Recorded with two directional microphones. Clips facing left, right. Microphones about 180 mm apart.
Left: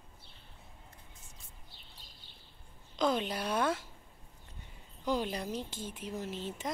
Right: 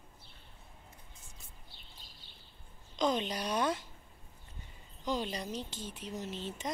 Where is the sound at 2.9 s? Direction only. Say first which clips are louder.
Left 1 dB; 5° left (ahead or behind).